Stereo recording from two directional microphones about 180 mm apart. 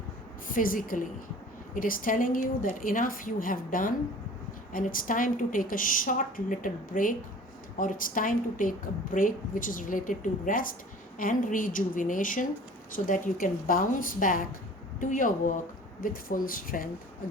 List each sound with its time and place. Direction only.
0.4 s a woman's voice: 50° left (ahead or behind)